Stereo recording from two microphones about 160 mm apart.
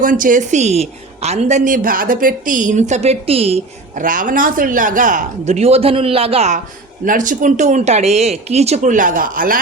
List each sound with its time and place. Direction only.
0.0 s a woman's voice: 55° right (ahead or behind); by 3.6 s 40° right (ahead or behind)
3.9 s a woman's voice: 55° right (ahead or behind); by 6.6 s 40° right (ahead or behind)
7.0 s a woman's voice: 55° right (ahead or behind)